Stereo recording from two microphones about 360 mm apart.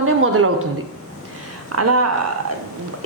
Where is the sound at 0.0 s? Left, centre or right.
Right.